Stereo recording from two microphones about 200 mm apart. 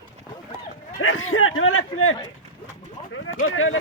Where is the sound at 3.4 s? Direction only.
90° left.